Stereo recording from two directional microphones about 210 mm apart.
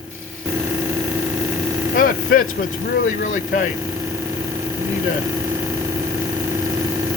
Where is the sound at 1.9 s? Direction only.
45° left (ahead or behind).